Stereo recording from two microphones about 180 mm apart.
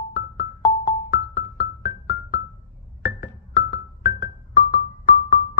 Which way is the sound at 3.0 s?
55° left (ahead or behind).